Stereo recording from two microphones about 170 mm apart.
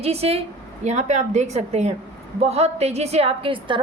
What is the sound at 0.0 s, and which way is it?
A woman's voice, 35° right (ahead or behind).